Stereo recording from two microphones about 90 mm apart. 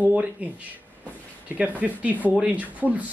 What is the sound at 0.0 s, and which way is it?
Speech, 15° right (ahead or behind).